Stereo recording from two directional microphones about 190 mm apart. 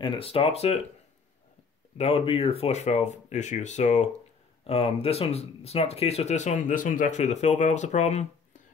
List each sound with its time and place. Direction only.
0.0 s speech: 30° left (ahead or behind)
2.0 s speech: 30° left (ahead or behind)